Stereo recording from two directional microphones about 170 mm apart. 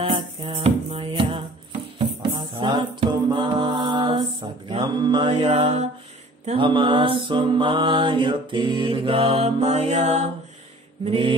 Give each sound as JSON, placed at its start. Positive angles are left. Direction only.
{"t": 0.0, "sound": "music", "side_deg": -30}
{"t": 6.4, "sound": "mantra", "side_deg": -30}